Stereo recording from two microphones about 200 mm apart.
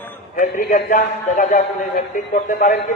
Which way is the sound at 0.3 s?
40° left (ahead or behind).